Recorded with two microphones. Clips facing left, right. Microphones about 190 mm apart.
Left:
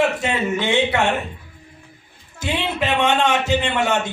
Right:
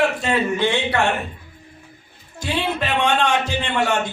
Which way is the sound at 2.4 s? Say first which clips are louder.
Left 1 dB; 20° left (ahead or behind).